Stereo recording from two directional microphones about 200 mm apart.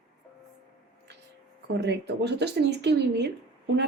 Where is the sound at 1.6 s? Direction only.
60° right (ahead or behind).